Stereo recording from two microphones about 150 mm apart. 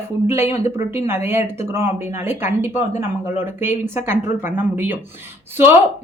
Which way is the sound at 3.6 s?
15° right (ahead or behind).